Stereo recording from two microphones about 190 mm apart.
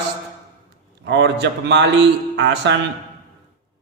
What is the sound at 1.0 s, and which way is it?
A man's voice, 70° right (ahead or behind).